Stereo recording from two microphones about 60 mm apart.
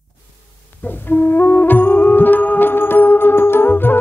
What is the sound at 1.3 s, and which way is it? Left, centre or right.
Music, left.